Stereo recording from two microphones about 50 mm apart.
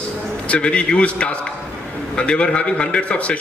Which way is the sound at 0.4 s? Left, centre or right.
Left.